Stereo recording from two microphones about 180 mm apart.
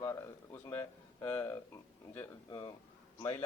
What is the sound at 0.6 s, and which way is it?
A man's voice, 15° left (ahead or behind).